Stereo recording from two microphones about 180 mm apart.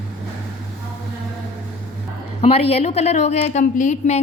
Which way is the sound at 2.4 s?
35° left (ahead or behind).